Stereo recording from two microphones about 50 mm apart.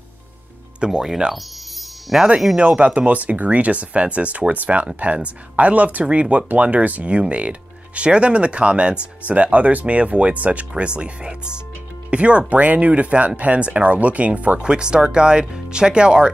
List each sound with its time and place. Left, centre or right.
0.7 s speech: centre
1.3 s chime: centre
2.5 s speech: right